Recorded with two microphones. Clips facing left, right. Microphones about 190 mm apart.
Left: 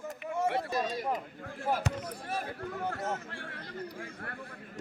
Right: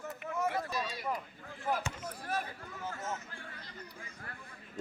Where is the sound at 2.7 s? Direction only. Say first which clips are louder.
Left 6 dB; 60° left (ahead or behind).